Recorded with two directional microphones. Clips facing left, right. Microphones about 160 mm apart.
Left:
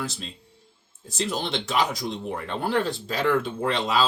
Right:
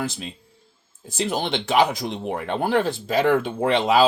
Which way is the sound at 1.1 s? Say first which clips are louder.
Right 3 dB; 60° right (ahead or behind).